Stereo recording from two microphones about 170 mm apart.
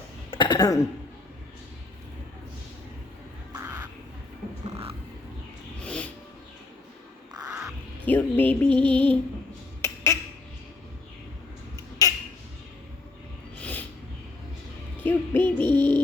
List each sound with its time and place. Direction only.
0.3 s cough: 25° left (ahead or behind)
3.5 s crow: 15° right (ahead or behind)
5.8 s vehicle: 5° left (ahead or behind)
7.4 s crow: 5° right (ahead or behind)
8.0 s music: 10° left (ahead or behind)
8.8 s child singing: 30° right (ahead or behind)
9.8 s squawk: 15° left (ahead or behind)
12.0 s a sound: 20° left (ahead or behind)
13.6 s a sound: 10° left (ahead or behind)
15.0 s music: 10° left (ahead or behind)